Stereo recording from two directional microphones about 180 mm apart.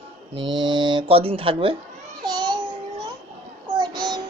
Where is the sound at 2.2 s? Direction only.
25° right (ahead or behind).